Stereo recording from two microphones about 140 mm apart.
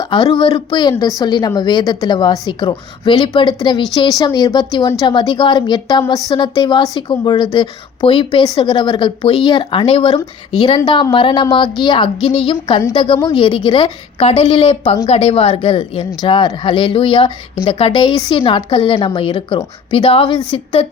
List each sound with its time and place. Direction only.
0.0 s a sound: 30° left (ahead or behind)
0.3 s a woman's voice: 40° left (ahead or behind)
10.6 s a woman's voice: 30° left (ahead or behind)